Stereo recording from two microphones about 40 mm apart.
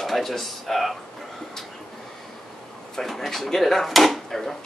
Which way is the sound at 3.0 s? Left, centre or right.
Centre.